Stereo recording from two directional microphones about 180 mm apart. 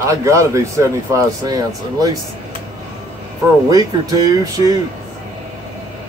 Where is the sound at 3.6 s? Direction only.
20° right (ahead or behind).